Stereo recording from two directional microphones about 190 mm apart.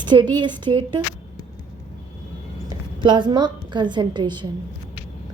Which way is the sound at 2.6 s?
25° right (ahead or behind).